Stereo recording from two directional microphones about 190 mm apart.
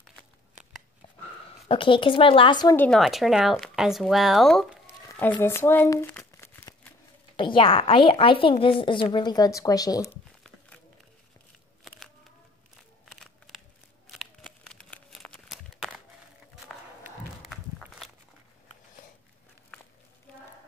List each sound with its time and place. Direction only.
1.7 s a woman's voice: 25° left (ahead or behind)
2.7 s speech: 5° left (ahead or behind)
5.1 s crumpling: 10° left (ahead or behind)
7.3 s a woman's voice: 25° left (ahead or behind)
13.1 s a sound: centre (ahead or behind)
14.1 s crumpling: centre (ahead or behind)
17.5 s walk: centre (ahead or behind)